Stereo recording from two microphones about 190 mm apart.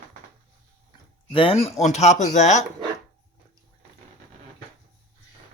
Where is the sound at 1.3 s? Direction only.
30° left (ahead or behind).